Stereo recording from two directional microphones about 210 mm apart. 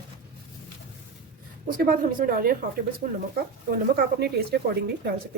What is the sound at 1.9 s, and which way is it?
Speech, 45° right (ahead or behind).